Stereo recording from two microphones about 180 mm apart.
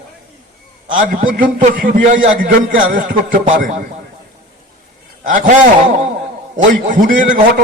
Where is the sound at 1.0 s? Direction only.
50° right (ahead or behind).